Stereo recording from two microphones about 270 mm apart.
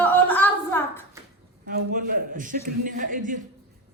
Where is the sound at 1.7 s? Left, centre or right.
Right.